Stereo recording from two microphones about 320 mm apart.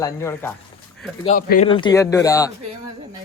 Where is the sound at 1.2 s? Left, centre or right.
Left.